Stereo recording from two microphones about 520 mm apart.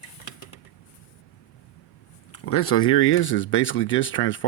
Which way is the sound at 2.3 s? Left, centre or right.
Left.